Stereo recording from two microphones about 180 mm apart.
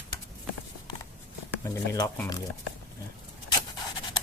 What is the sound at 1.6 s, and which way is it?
Speech, 20° left (ahead or behind).